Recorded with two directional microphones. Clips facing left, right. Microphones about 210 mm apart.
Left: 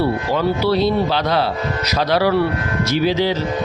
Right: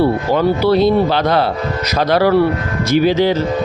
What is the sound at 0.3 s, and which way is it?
Speech, 50° right (ahead or behind).